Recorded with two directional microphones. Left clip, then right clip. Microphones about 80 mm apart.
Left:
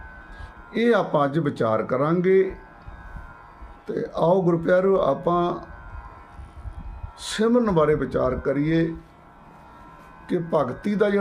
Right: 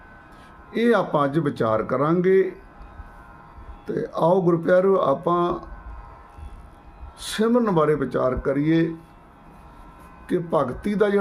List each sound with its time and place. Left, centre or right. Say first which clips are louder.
0.7 s speech: even; right
3.8 s speech: right 1 dB; right
7.2 s speech: even; right
10.2 s speech: right 1 dB; right